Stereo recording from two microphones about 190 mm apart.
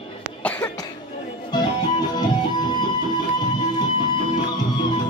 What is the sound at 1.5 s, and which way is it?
Music, 20° left (ahead or behind).